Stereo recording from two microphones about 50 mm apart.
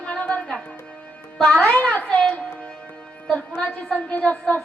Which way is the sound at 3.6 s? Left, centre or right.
Left.